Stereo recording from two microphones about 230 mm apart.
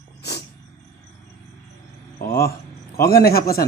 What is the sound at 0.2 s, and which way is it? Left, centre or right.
Cat, left.